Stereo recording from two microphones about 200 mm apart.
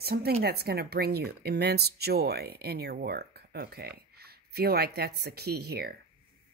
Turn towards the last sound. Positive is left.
turn(degrees=-50)  # may be behind; listen again after turning